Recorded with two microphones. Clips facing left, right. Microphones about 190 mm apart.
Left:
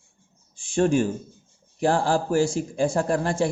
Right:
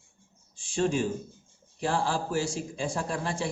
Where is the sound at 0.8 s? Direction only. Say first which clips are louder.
Left 6 dB; 55° left (ahead or behind).